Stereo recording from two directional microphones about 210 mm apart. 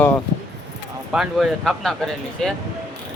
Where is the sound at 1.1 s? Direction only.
Centre (ahead or behind).